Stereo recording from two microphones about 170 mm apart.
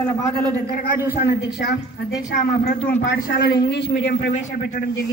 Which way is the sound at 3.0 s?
70° left (ahead or behind).